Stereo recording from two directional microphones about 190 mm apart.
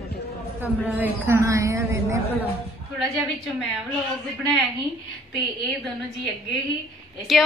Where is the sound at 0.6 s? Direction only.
10° right (ahead or behind).